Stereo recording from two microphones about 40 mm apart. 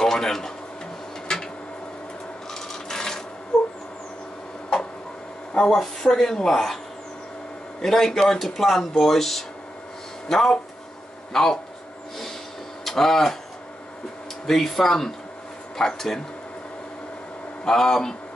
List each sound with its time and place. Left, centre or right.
0.0 s speech: centre
1.2 s a sound: centre
2.5 s rub: centre
5.5 s a sound: centre
5.8 s speech: centre
7.8 s speech: centre
8.5 s speech: centre
12.8 s speech: centre
14.4 s speech: centre
17.6 s speech: centre